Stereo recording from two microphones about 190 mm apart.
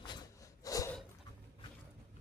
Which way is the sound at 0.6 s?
20° left (ahead or behind).